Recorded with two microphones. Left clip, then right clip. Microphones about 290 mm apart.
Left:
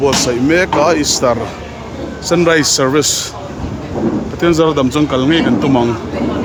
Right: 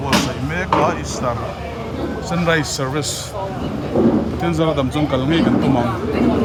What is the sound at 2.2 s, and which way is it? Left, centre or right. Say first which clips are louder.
Speech: left 8 dB; centre.